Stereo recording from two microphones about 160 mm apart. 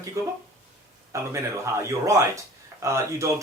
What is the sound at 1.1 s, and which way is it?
Speech, 20° right (ahead or behind).